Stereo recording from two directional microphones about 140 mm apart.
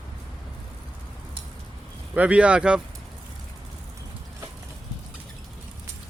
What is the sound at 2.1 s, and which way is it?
Speech, 10° right (ahead or behind).